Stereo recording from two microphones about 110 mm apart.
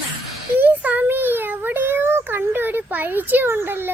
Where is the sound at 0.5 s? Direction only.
15° right (ahead or behind).